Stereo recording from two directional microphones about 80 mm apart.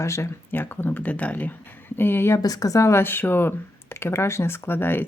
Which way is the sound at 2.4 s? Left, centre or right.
Left.